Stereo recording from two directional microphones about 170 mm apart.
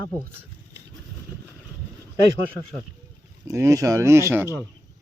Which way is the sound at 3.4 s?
20° right (ahead or behind).